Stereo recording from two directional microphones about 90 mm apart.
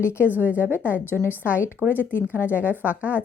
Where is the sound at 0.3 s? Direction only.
20° right (ahead or behind).